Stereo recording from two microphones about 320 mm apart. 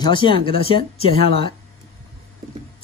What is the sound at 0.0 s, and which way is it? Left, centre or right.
Speech, centre.